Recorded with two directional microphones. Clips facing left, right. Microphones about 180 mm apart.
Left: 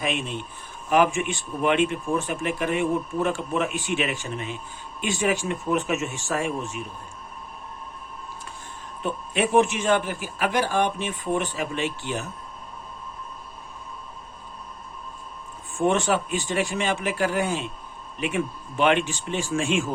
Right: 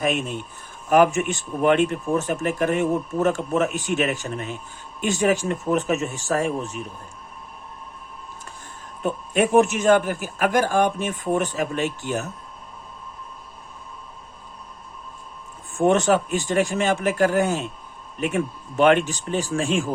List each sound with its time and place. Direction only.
0.0 s speech: 45° right (ahead or behind)
9.0 s speech: 45° right (ahead or behind)
15.8 s speech: 45° right (ahead or behind)